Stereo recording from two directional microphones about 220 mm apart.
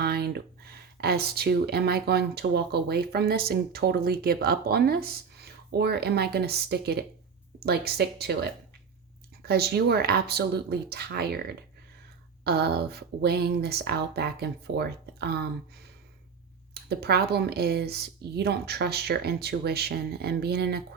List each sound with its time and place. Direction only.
0.0 s speech: 45° right (ahead or behind)
16.7 s speech: 45° right (ahead or behind)